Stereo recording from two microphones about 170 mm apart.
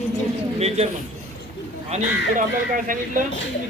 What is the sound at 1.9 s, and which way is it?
Speech, 50° right (ahead or behind).